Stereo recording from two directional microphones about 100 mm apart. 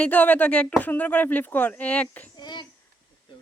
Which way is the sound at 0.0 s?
15° left (ahead or behind).